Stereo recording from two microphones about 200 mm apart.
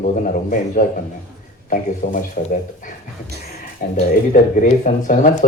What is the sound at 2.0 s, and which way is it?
Speech, 40° left (ahead or behind).